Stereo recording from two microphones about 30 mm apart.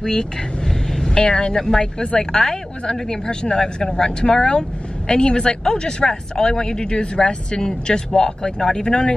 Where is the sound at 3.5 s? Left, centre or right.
Left.